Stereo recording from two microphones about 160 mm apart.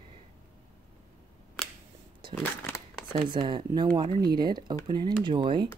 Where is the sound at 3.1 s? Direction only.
35° right (ahead or behind).